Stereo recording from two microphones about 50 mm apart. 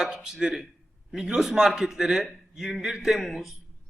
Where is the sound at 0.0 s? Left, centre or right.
Centre.